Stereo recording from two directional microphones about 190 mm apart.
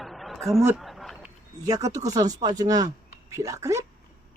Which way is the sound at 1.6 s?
20° right (ahead or behind).